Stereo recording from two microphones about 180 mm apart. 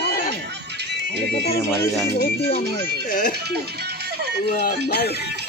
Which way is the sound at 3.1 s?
50° left (ahead or behind).